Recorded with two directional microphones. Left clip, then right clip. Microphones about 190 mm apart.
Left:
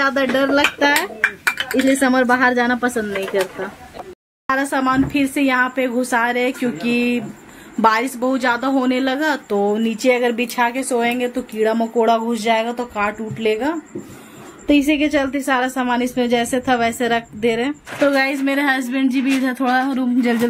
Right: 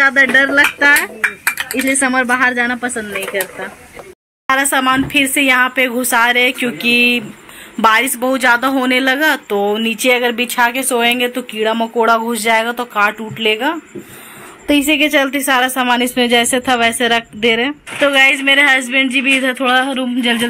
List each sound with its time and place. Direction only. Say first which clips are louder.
0.0 s a woman's voice: right 7 dB; 5° right (ahead or behind)
6.8 s speech: right 10 dB; 45° left (ahead or behind)
7.8 s a woman's voice: right 4 dB; 5° left (ahead or behind)